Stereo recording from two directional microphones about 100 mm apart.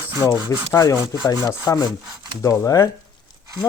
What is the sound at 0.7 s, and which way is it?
Speech, 35° left (ahead or behind).